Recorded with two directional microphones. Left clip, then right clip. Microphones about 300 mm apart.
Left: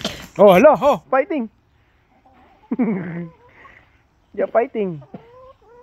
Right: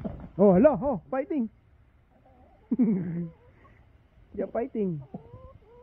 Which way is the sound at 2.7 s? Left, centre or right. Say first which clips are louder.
Left 5 dB; centre.